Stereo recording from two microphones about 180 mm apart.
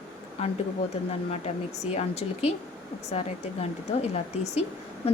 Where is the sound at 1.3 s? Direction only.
35° left (ahead or behind).